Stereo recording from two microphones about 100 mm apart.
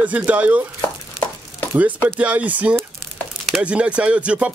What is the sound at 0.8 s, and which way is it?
Chopping, 25° left (ahead or behind).